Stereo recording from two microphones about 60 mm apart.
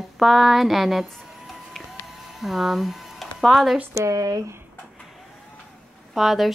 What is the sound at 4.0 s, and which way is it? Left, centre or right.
Speech, right.